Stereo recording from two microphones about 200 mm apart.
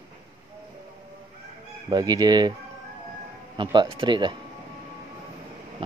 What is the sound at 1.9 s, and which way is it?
Speech, 20° right (ahead or behind).